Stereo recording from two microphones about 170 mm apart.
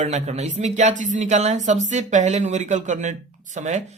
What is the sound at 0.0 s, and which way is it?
Speech, 40° right (ahead or behind).